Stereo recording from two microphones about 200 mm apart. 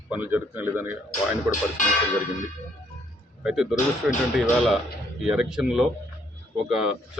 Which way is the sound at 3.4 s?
5° right (ahead or behind).